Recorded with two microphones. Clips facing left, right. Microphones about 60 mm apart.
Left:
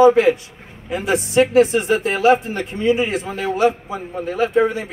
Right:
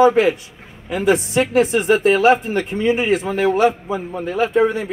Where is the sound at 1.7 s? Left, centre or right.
Right.